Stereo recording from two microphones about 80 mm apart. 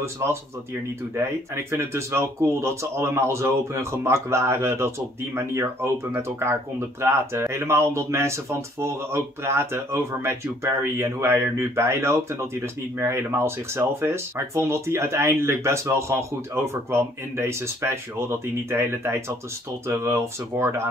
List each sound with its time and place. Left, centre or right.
0.0 s speech: right